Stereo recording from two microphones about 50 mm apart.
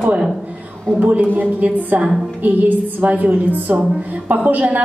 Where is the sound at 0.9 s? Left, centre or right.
Right.